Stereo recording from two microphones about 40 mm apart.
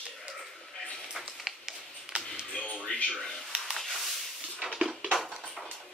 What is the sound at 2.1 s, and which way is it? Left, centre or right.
Music, right.